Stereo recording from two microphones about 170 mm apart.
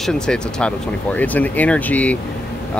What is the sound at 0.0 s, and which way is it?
Speech, 5° left (ahead or behind).